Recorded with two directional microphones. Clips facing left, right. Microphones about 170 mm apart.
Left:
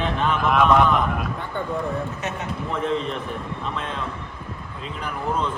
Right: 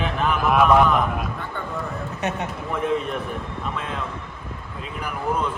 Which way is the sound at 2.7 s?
10° right (ahead or behind).